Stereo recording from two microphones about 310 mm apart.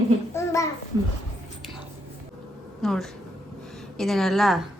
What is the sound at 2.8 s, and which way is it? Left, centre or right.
A woman's voice, centre.